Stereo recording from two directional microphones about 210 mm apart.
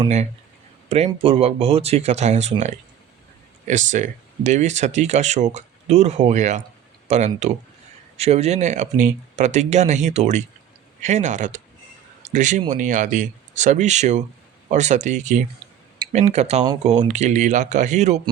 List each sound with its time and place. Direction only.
0.9 s speech: 30° right (ahead or behind)